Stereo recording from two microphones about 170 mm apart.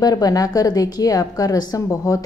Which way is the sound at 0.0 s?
20° left (ahead or behind).